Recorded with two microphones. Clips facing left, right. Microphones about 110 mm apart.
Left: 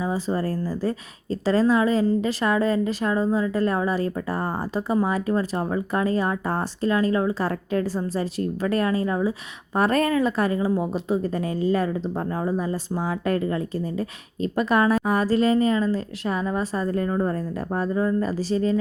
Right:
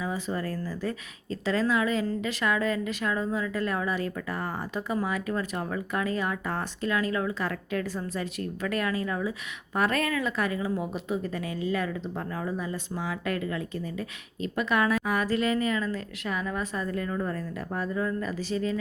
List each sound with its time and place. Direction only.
0.0 s a woman's voice: 30° left (ahead or behind)